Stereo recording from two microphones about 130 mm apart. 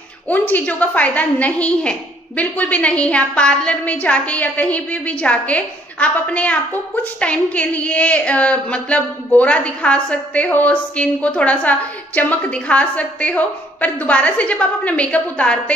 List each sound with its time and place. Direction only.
0.3 s a woman's voice: 15° left (ahead or behind)